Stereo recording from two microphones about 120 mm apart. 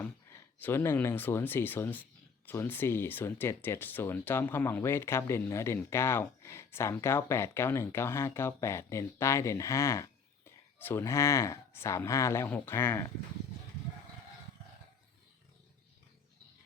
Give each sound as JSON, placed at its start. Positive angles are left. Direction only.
{"t": 0.3, "sound": "speech", "side_deg": 20}